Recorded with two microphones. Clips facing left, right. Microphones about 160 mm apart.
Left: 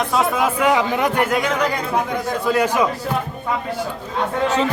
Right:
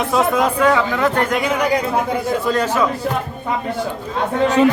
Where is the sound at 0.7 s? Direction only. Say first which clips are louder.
Right 1 dB; 15° left (ahead or behind).